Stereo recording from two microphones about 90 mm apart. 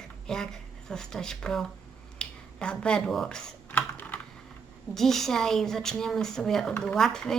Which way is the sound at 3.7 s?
20° left (ahead or behind).